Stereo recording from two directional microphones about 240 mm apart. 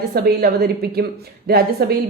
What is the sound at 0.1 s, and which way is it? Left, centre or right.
A woman's voice, right.